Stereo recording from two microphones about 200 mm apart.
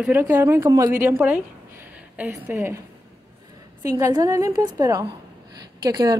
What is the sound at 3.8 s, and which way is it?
A woman's voice, 15° right (ahead or behind).